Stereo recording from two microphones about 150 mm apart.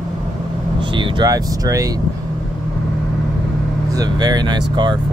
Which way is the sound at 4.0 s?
25° right (ahead or behind).